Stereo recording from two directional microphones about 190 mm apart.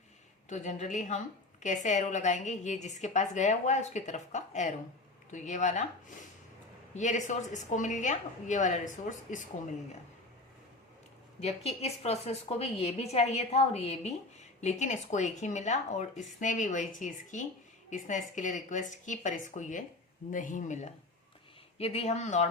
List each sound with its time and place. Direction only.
0.4 s a woman's voice: 40° left (ahead or behind)
11.3 s a woman's voice: 35° left (ahead or behind)